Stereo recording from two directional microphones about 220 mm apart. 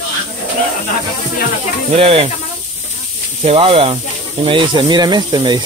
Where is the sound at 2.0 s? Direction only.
25° right (ahead or behind).